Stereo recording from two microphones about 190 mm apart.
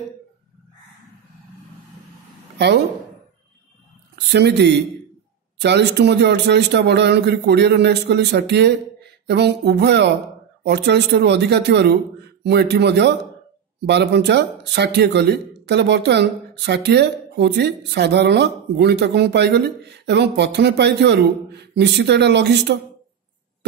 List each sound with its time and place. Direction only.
4.3 s speech: 60° right (ahead or behind)